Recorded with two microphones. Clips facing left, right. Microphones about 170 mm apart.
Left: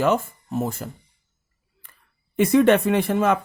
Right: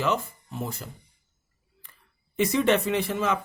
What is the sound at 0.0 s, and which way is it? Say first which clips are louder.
Speech: left 6 dB; 50° left (ahead or behind).